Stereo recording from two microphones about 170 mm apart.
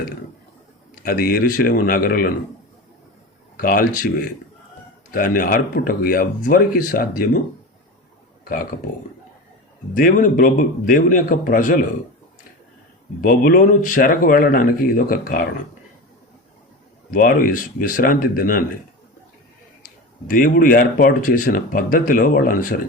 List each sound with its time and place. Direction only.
1.0 s speech: 60° left (ahead or behind)
3.6 s speech: 55° left (ahead or behind)
5.1 s speech: 55° left (ahead or behind)
9.9 s speech: 50° left (ahead or behind)
13.2 s speech: 50° left (ahead or behind)
17.1 s speech: 55° left (ahead or behind)
20.2 s speech: 55° left (ahead or behind)